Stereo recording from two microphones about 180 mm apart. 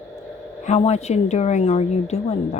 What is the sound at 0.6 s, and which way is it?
A woman's voice, 35° left (ahead or behind).